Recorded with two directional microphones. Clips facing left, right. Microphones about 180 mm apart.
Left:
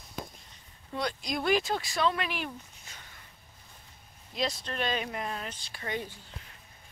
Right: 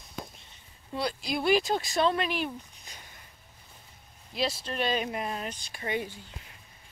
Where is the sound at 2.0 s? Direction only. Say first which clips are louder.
Right 2 dB; 30° right (ahead or behind).